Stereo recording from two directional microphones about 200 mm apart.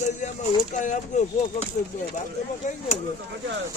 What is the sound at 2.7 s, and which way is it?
Speech, 35° left (ahead or behind).